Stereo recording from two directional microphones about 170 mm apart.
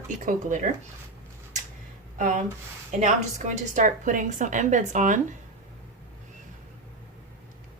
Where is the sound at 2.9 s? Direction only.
45° right (ahead or behind).